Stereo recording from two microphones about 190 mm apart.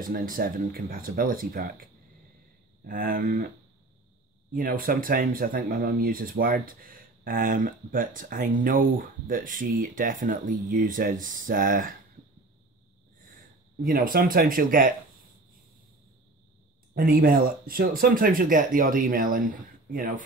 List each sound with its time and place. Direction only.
0.0 s speech: 50° right (ahead or behind)
4.6 s speech: 50° right (ahead or behind)
13.7 s speech: 50° right (ahead or behind)
16.9 s speech: 50° right (ahead or behind)